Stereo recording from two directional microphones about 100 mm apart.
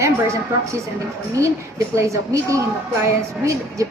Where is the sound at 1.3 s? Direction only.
30° right (ahead or behind).